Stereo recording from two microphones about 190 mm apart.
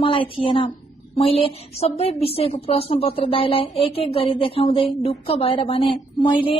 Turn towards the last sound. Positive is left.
turn(degrees=25)  # may be behind; listen again after turning